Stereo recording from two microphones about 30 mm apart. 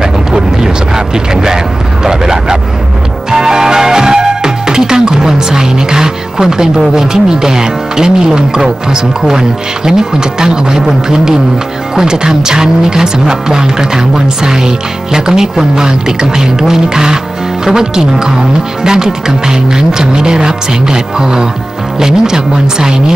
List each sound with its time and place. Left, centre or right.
0.9 s speech: centre
3.3 s music: centre
6.8 s speech: right